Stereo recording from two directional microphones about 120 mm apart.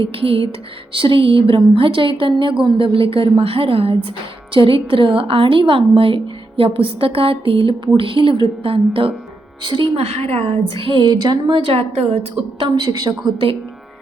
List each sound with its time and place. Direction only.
0.0 s a woman's voice: 50° right (ahead or behind)
10.0 s a woman's voice: 60° right (ahead or behind); by 13.5 s 35° right (ahead or behind)